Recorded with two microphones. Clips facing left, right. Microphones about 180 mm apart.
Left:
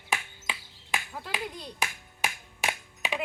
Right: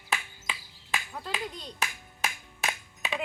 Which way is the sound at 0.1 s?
10° left (ahead or behind).